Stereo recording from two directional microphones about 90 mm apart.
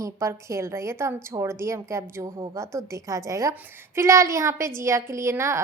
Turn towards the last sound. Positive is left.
turn(degrees=-30)  # may be behind; listen again after turning